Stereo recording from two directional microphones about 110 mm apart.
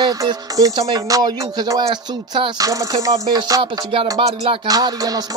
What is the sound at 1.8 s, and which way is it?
Speech, 45° right (ahead or behind).